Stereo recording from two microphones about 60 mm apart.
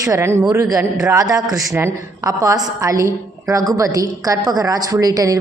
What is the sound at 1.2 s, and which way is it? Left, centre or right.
A woman's voice, right.